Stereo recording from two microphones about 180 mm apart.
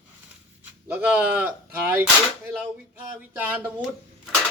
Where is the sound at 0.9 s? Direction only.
10° right (ahead or behind).